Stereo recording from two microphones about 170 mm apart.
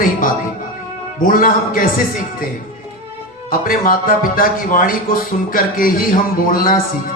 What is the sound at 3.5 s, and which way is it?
Speech, 55° left (ahead or behind).